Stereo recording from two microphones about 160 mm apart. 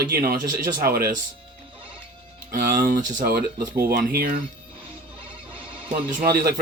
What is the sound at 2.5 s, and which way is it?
Speech, 60° right (ahead or behind).